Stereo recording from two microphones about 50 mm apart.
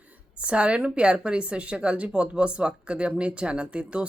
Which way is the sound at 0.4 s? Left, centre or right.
Right.